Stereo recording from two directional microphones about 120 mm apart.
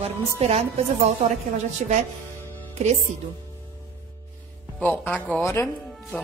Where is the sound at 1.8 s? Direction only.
80° right.